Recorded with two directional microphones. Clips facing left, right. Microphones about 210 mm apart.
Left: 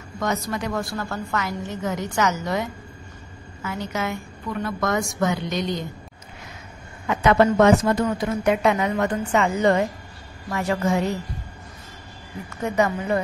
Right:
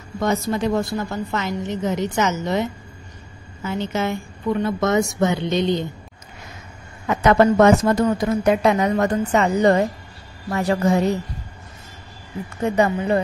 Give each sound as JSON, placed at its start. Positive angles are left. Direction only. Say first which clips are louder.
{"t": 0.2, "sound": "a woman's voice", "louder": "right 5 dB", "side_deg": -30}
{"t": 7.1, "sound": "a woman's voice", "louder": "right 2 dB", "side_deg": -40}
{"t": 12.6, "sound": "a woman's voice", "louder": "right 3 dB", "side_deg": -30}